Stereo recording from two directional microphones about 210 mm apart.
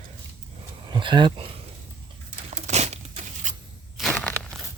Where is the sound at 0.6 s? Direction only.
20° right (ahead or behind).